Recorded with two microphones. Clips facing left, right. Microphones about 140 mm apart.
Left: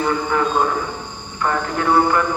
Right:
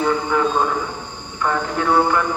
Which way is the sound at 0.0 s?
5° left (ahead or behind).